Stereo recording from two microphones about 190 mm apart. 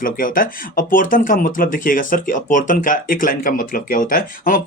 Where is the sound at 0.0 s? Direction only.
45° left (ahead or behind).